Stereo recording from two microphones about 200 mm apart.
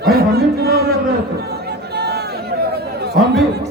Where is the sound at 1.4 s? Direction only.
55° right (ahead or behind).